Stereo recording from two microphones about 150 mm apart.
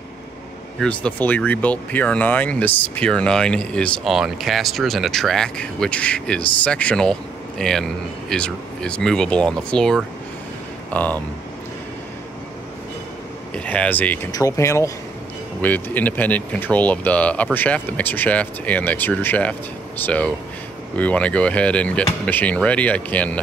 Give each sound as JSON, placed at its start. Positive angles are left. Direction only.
{"t": 0.7, "sound": "speech", "side_deg": 5}
{"t": 13.7, "sound": "speech", "side_deg": 10}